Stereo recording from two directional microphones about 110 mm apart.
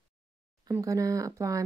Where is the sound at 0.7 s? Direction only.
30° right (ahead or behind).